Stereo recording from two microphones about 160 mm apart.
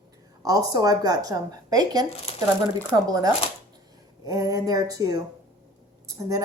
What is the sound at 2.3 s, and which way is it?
Speech, 40° left (ahead or behind).